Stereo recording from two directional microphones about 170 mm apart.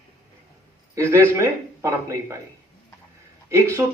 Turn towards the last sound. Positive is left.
turn(degrees=-15)  # may be behind; listen again after turning